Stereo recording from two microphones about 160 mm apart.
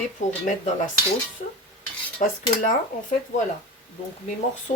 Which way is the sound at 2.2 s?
50° left (ahead or behind).